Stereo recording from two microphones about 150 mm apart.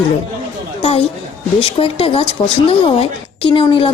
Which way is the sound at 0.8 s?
40° left (ahead or behind).